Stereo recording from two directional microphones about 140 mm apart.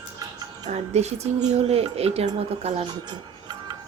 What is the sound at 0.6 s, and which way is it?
Speech, 50° right (ahead or behind).